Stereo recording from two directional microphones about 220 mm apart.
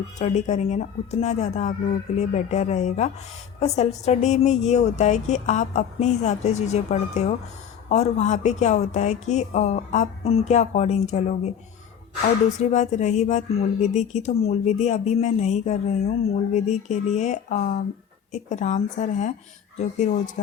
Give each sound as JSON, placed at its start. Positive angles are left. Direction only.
{"t": 0.2, "sound": "speech", "side_deg": 30}